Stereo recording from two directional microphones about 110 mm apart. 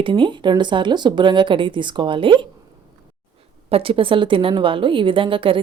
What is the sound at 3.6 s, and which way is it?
A woman's voice, 60° right (ahead or behind).